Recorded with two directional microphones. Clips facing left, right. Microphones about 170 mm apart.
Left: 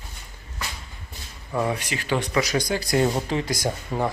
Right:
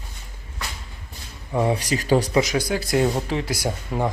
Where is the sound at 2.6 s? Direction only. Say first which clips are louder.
Right 1 dB; 5° right (ahead or behind).